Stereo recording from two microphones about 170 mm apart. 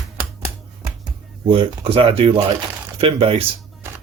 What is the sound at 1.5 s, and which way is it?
Speech, 30° right (ahead or behind).